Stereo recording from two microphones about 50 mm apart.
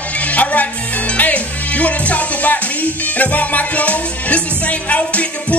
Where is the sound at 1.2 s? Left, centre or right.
Left.